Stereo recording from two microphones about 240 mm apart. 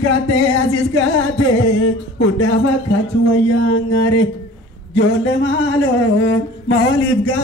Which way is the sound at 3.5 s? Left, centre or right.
Left.